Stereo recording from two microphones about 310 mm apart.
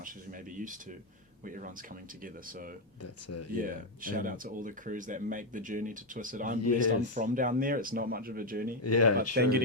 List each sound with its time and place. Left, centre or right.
0.5 s speech: right
3.0 s speech: left
3.6 s speech: right
8.8 s speech: left
9.3 s speech: right